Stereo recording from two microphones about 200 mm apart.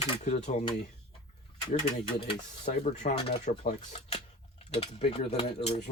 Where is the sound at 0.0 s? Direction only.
35° left (ahead or behind).